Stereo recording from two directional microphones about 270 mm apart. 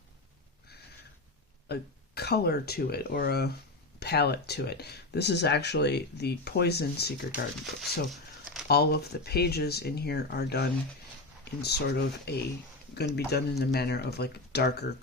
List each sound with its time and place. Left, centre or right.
1.6 s speech: left
7.3 s speech: centre
8.1 s a sound: centre
8.6 s speech: left